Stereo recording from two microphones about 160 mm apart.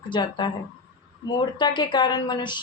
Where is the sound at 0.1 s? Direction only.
30° left (ahead or behind).